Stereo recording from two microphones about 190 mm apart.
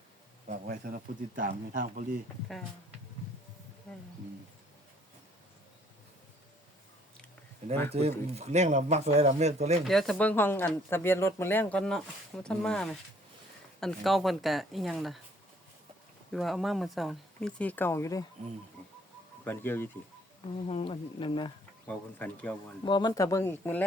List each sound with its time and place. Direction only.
0.4 s speech: 45° right (ahead or behind)
7.9 s speech: 35° right (ahead or behind)
9.8 s speech: centre (ahead or behind)
16.3 s speech: centre (ahead or behind); by 18.3 s 15° left (ahead or behind)
19.5 s speech: 10° left (ahead or behind)
20.7 s speech: 30° left (ahead or behind)
21.8 s speech: 5° left (ahead or behind)
22.9 s speech: 25° left (ahead or behind)